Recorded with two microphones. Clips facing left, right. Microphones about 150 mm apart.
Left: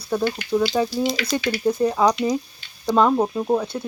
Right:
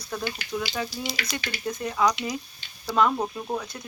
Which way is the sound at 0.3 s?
40° left (ahead or behind).